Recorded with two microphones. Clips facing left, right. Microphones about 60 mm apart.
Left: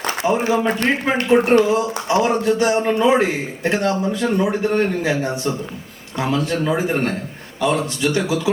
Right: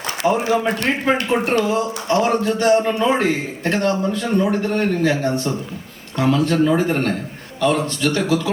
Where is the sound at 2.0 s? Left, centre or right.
Centre.